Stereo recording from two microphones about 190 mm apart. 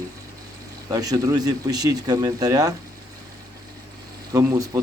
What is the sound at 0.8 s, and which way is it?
Speech, 20° right (ahead or behind).